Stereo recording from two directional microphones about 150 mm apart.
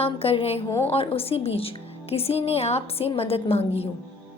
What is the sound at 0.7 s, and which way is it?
Speech, 20° left (ahead or behind).